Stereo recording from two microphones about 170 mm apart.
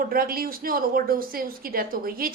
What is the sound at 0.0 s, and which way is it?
A woman's voice, 60° right (ahead or behind).